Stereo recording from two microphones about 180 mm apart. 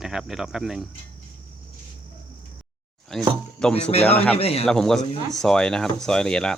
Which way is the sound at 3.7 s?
35° left (ahead or behind).